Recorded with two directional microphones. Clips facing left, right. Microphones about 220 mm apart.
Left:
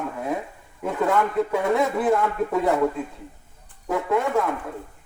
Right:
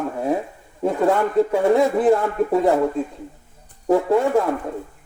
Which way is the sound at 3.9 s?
30° right (ahead or behind).